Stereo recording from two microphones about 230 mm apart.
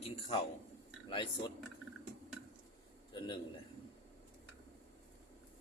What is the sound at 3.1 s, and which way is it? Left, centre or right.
Speech, left.